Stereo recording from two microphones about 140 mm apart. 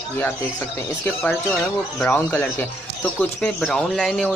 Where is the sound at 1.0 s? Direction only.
10° left (ahead or behind).